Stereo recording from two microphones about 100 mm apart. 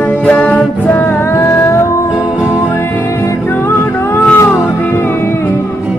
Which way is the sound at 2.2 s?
10° right (ahead or behind).